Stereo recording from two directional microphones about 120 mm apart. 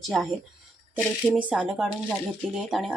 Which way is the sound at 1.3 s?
10° right (ahead or behind).